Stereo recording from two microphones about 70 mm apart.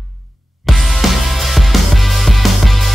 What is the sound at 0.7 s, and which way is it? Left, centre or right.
Music, centre.